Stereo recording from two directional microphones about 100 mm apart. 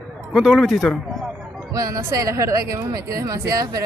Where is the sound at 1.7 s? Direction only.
35° right (ahead or behind).